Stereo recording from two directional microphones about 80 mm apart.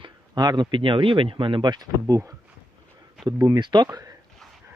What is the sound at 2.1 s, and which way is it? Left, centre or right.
Speech, right.